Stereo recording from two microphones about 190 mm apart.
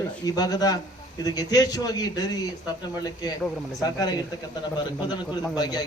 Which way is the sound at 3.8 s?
20° left (ahead or behind).